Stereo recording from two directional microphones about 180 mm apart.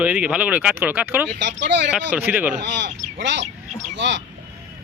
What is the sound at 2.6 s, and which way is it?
Speech, 80° right.